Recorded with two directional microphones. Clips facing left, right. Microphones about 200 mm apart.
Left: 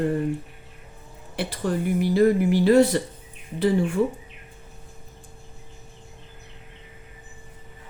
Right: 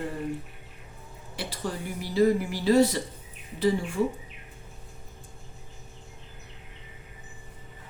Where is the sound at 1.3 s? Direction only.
60° left (ahead or behind).